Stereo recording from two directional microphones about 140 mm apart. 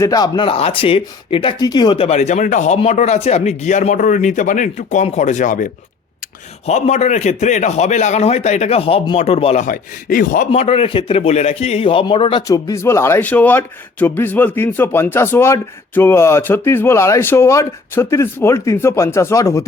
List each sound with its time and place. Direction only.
0.0 s speech: 25° left (ahead or behind)
2.0 s speech: 55° left (ahead or behind)
6.7 s a man's voice: 50° left (ahead or behind)
9.6 s a man's voice: 80° left
10.5 s a man's voice: 45° left (ahead or behind)
12.5 s a man's voice: 25° left (ahead or behind)